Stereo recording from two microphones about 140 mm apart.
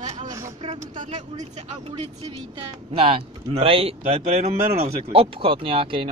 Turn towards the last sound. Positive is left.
turn(degrees=-40)  # may be behind; listen again after turning